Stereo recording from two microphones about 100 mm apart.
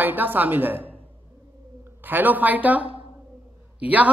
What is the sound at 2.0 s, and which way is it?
Speech, 20° right (ahead or behind).